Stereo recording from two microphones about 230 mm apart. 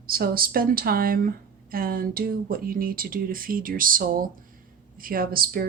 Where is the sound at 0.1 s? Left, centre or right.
Right.